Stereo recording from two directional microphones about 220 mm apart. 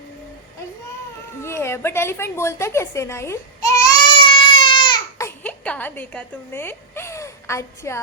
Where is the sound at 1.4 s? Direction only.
10° left (ahead or behind).